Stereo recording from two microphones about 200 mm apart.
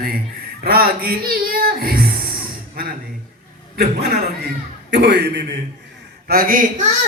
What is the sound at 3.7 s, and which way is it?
A man's voice, 50° right (ahead or behind).